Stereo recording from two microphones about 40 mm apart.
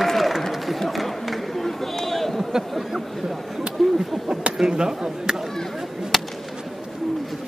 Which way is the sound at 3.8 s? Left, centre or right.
Centre.